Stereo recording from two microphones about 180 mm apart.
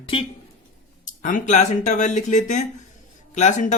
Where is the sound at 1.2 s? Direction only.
45° left (ahead or behind).